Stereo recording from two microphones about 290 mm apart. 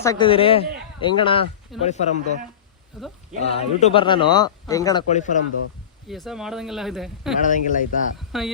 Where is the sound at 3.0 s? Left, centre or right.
Centre.